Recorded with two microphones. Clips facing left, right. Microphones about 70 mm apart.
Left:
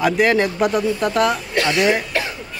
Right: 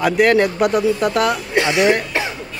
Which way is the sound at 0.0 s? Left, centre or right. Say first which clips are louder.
Right 2 dB; centre.